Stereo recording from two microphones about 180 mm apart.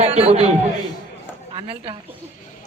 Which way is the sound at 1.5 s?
30° right (ahead or behind).